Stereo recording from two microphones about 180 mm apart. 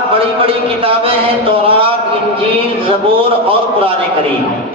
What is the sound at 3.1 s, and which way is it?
Speech, 30° right (ahead or behind).